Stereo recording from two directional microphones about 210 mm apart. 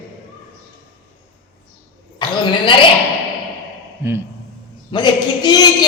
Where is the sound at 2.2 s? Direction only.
20° left (ahead or behind).